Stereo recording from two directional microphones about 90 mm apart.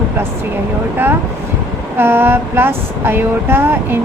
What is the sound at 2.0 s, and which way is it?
Speech, 25° right (ahead or behind).